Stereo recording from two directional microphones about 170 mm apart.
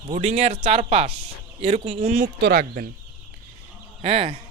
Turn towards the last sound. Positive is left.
turn(degrees=-30)  # may be behind; listen again after turning